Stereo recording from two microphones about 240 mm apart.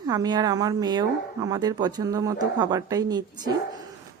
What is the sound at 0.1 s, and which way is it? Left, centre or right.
Speech, centre.